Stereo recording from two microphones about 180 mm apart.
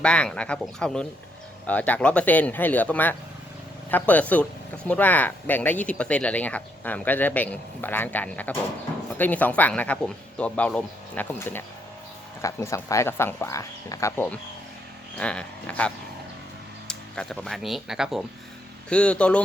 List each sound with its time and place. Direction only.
0.0 s speech: 5° left (ahead or behind)
16.9 s speech: 5° left (ahead or behind)